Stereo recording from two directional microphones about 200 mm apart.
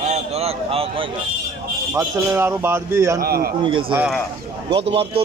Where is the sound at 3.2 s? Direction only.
50° right (ahead or behind).